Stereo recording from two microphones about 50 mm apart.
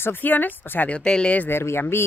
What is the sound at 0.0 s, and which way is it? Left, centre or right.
Speech, left.